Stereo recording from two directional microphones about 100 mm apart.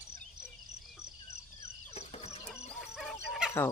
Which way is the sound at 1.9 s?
90° left.